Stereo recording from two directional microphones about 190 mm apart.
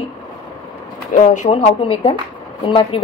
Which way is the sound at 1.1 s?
40° left (ahead or behind).